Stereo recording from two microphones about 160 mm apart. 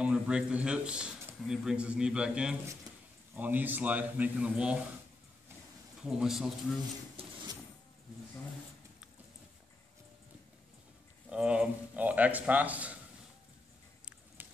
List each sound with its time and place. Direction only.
0.0 s speech: 5° right (ahead or behind)
6.0 s speech: 5° right (ahead or behind)
7.2 s printer: 35° right (ahead or behind)
11.2 s speech: 5° right (ahead or behind)
14.0 s a sound: 10° right (ahead or behind)